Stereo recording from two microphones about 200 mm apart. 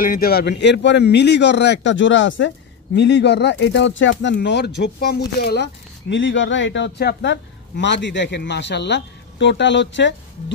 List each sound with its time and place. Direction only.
0.0 s a man's voice: 45° left (ahead or behind); by 10.1 s 65° left (ahead or behind)